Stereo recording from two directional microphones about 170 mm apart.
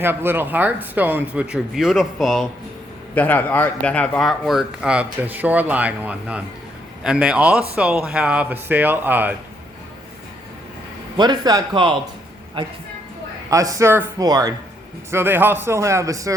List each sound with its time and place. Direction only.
0.0 s speech: 15° right (ahead or behind)
11.2 s speech: 25° right (ahead or behind)
13.5 s speech: 20° right (ahead or behind)